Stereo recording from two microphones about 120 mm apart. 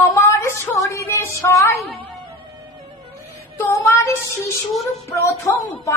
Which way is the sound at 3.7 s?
25° left (ahead or behind).